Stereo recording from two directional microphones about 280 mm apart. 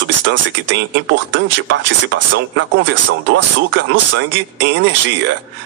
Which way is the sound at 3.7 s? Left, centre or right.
Right.